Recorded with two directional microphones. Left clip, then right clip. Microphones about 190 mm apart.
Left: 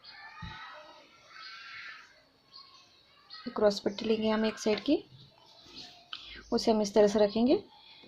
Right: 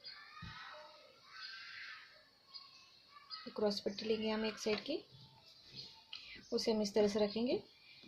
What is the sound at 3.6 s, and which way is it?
Speech, 40° left (ahead or behind).